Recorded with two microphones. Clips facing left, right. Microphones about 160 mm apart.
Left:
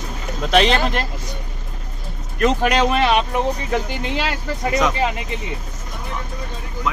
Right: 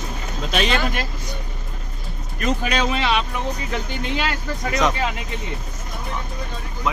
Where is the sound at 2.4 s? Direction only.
70° left (ahead or behind); by 3.2 s 50° left (ahead or behind).